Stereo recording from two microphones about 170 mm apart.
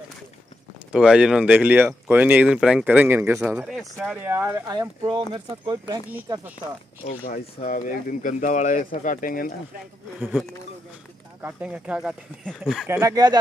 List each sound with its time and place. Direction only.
0.9 s speech: 5° right (ahead or behind); by 5.9 s 25° right (ahead or behind)
6.0 s speech: 10° right (ahead or behind)
7.1 s speech: 50° left (ahead or behind)
11.4 s speech: 10° right (ahead or behind)
13.1 s speech: 20° right (ahead or behind)